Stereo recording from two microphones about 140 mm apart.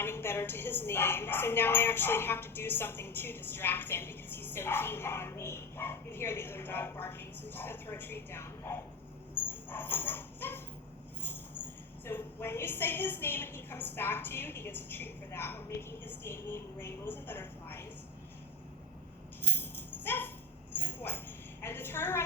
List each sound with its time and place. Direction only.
0.0 s a woman's voice: 15° left (ahead or behind)
9.5 s dog: 15° left (ahead or behind)
12.0 s a woman's voice: 15° left (ahead or behind)
19.4 s tambourine: 15° left (ahead or behind)
20.7 s a sound: 15° left (ahead or behind)